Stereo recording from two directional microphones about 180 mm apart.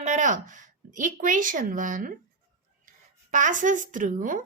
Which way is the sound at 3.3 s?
45° right (ahead or behind).